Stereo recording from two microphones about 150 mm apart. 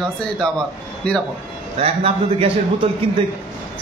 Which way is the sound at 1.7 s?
40° right (ahead or behind).